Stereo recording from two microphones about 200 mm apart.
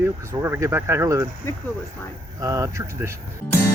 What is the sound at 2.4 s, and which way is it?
Speech, 15° right (ahead or behind).